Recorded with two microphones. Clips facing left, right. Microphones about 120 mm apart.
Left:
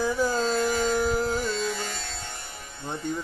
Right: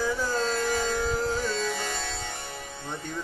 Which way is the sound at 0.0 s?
15° left (ahead or behind).